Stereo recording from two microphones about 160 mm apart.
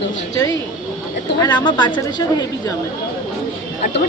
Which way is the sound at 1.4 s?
30° left (ahead or behind).